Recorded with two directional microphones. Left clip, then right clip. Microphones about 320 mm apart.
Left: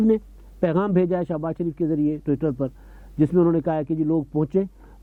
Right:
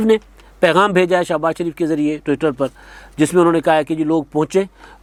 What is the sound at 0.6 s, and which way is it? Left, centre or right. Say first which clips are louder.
A man's voice: right 9 dB; centre.